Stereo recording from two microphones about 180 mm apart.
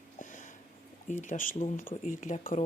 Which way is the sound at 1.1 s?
45° left (ahead or behind).